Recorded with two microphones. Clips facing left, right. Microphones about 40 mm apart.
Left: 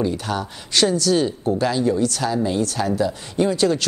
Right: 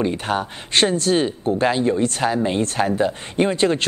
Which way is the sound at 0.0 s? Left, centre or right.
Right.